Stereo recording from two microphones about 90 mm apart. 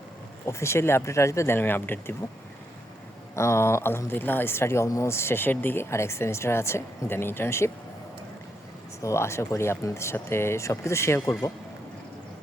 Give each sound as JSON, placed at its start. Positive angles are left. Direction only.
{"t": 0.4, "sound": "speech", "side_deg": 30}
{"t": 3.3, "sound": "speech", "side_deg": 30}
{"t": 9.0, "sound": "speech", "side_deg": 35}